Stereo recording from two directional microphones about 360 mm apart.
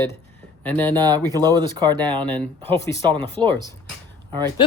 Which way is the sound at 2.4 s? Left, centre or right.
Centre.